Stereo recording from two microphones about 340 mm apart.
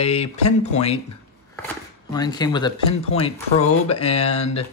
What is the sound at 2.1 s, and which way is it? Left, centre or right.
Speech, centre.